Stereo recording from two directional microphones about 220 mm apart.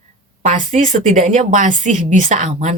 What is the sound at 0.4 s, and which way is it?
A woman's voice, 35° right (ahead or behind).